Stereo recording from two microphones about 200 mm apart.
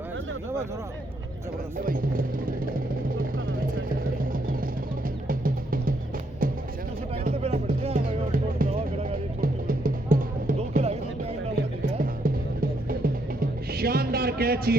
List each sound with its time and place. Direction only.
1.8 s speech: 45° right (ahead or behind)
3.2 s vehicle: 45° right (ahead or behind)
5.3 s music: 45° right (ahead or behind)
7.3 s music: 30° right (ahead or behind)
7.9 s music: 45° right (ahead or behind)
10.6 s music: 30° right (ahead or behind)
11.5 s music: 45° right (ahead or behind)